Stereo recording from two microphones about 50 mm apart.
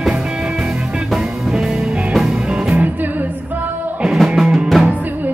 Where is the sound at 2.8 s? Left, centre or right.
Right.